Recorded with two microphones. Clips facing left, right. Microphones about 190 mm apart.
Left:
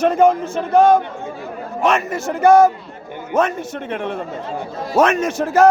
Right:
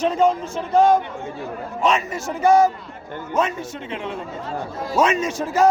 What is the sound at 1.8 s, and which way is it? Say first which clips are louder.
Speech: left 3 dB; 50° left (ahead or behind).